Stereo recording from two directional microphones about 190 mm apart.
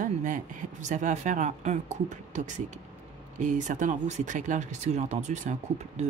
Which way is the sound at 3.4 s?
40° right (ahead or behind).